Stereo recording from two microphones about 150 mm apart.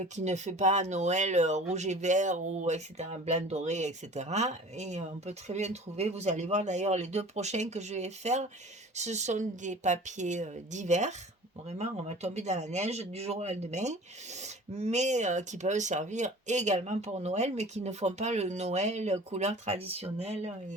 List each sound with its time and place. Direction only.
0.0 s speech: 50° right (ahead or behind)